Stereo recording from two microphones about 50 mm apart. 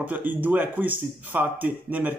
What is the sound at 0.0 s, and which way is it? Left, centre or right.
Speech, right.